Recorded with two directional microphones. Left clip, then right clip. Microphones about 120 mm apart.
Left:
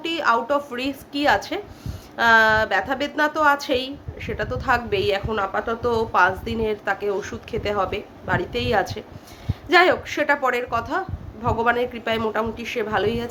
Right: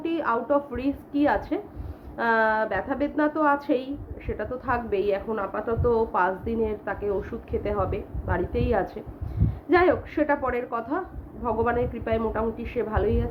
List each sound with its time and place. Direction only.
0.0 s a woman's voice: 15° left (ahead or behind)